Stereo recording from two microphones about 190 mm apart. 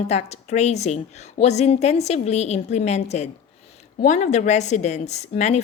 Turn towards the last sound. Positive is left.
turn(degrees=35)  # may be behind; listen again after turning